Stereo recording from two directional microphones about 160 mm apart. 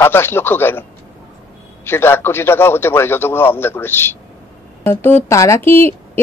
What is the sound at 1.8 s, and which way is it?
A woman's voice, 15° left (ahead or behind).